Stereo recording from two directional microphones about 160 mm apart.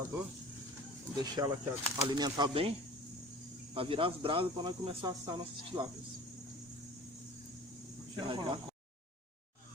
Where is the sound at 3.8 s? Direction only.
35° right (ahead or behind).